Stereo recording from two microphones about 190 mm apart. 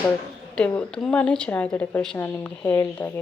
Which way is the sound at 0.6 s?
5° left (ahead or behind).